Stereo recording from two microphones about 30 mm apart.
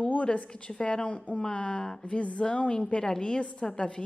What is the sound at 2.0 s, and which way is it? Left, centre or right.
Speech, left.